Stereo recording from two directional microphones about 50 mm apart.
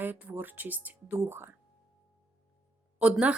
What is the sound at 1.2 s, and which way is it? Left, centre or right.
Speech, right.